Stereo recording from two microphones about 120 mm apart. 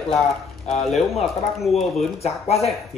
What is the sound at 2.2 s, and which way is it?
Speech, 60° left (ahead or behind).